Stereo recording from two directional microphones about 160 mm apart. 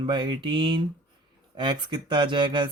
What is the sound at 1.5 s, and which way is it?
Mantra, 30° right (ahead or behind).